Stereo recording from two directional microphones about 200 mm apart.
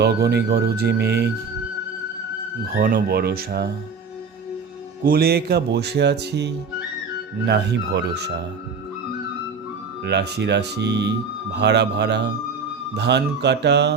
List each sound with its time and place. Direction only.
0.0 s speech: 55° right (ahead or behind)
2.7 s speech: 45° right (ahead or behind)
5.0 s speech: 50° right (ahead or behind)
10.0 s speech: 55° right (ahead or behind)